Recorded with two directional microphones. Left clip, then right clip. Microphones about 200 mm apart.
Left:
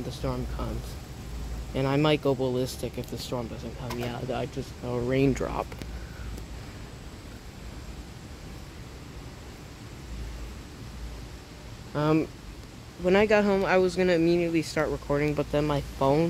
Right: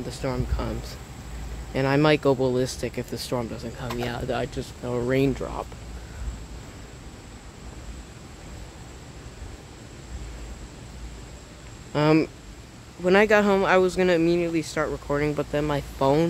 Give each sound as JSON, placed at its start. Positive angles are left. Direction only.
{"t": 0.1, "sound": "speech", "side_deg": -20}
{"t": 1.7, "sound": "speech", "side_deg": -20}
{"t": 5.3, "sound": "speech", "side_deg": 15}
{"t": 11.9, "sound": "speech", "side_deg": -30}
{"t": 13.0, "sound": "speech", "side_deg": -10}
{"t": 16.0, "sound": "speech", "side_deg": -15}